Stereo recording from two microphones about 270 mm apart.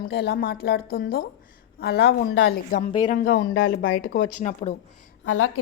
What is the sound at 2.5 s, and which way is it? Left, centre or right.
Speech, centre.